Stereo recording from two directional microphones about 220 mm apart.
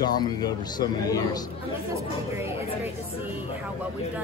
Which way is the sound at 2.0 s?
10° right (ahead or behind).